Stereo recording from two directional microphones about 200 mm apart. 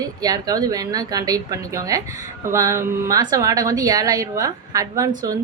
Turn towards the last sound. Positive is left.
turn(degrees=-15)  # may be behind; listen again after turning